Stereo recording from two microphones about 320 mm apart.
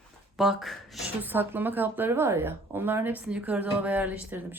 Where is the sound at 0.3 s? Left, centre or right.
Centre.